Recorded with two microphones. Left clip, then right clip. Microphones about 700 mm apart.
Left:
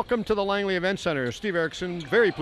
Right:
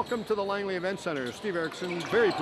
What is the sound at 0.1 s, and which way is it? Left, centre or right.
Speech, left.